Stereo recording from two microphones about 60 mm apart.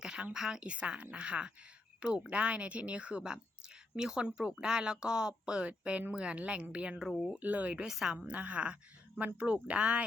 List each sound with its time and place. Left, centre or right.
0.0 s a sound: centre
0.3 s speech: centre
7.9 s speech: centre
8.3 s speech: right